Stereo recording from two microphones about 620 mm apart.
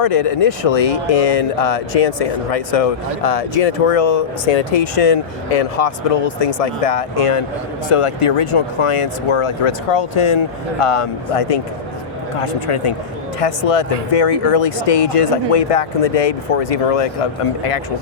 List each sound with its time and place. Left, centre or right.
0.0 s speech: left
4.8 s speech: left